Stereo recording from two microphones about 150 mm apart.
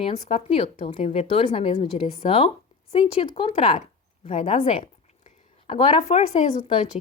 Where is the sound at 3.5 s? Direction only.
50° left (ahead or behind).